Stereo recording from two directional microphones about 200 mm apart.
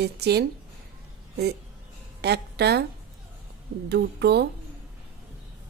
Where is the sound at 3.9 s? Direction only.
55° right (ahead or behind).